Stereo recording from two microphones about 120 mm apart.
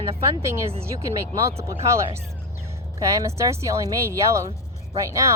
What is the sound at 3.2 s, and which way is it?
A woman's voice, 25° right (ahead or behind).